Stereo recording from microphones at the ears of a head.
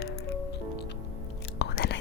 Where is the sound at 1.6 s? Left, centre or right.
Left.